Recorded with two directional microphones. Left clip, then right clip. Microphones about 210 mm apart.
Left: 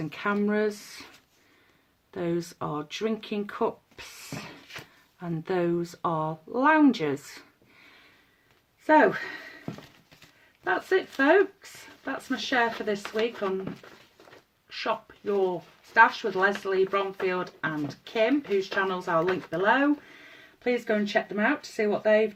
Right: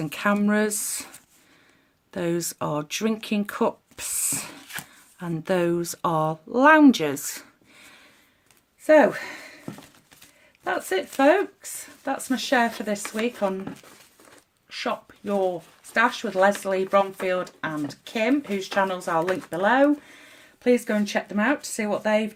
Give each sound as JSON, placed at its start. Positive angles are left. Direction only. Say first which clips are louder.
{"t": 0.1, "sound": "speech", "louder": "right 4 dB", "side_deg": -50}
{"t": 2.1, "sound": "speech", "louder": "right 4 dB", "side_deg": -45}
{"t": 8.9, "sound": "speech", "louder": "right 3 dB", "side_deg": -45}
{"t": 10.6, "sound": "speech", "louder": "even", "side_deg": -45}
{"t": 14.7, "sound": "speech", "louder": "right 1 dB", "side_deg": -45}